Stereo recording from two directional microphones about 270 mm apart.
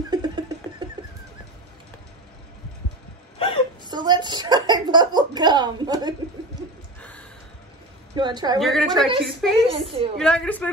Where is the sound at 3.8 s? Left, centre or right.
Centre.